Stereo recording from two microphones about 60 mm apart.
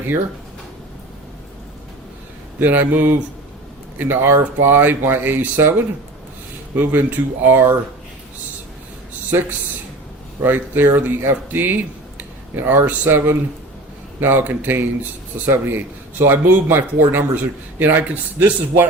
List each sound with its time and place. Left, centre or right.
2.6 s speech: right
6.7 s speech: right
9.3 s speech: right
10.4 s speech: right